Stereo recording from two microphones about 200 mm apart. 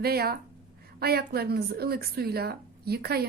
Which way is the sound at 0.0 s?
50° right (ahead or behind).